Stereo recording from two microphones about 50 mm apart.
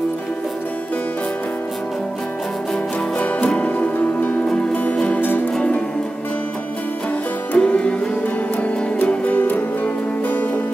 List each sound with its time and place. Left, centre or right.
3.4 s music: left
4.5 s music: centre
7.5 s music: left
9.0 s music: left